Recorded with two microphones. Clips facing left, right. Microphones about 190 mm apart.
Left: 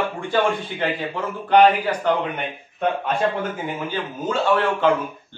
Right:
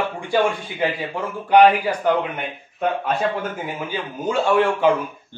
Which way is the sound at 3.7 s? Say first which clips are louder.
Left 1 dB; 10° right (ahead or behind).